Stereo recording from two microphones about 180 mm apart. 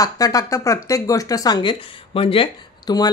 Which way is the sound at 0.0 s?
20° left (ahead or behind).